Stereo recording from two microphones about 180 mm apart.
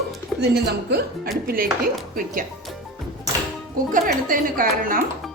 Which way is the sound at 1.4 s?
55° right (ahead or behind).